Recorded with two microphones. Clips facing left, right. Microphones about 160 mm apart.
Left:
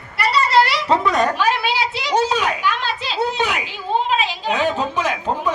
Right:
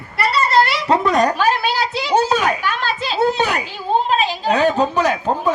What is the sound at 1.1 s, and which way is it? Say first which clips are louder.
Speech: right 2 dB; 40° right (ahead or behind).